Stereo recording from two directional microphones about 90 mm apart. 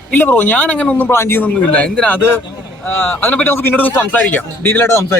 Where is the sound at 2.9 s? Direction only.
25° left (ahead or behind).